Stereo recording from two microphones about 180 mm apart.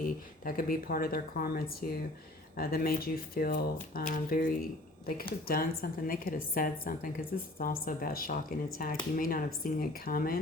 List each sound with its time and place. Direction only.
0.4 s a woman's voice: 50° left (ahead or behind)